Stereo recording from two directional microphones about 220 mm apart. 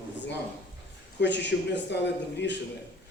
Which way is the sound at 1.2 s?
55° left (ahead or behind).